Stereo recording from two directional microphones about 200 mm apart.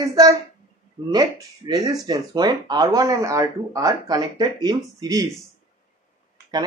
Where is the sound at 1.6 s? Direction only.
20° right (ahead or behind).